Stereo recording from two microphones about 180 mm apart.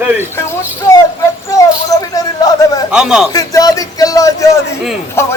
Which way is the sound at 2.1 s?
20° left (ahead or behind).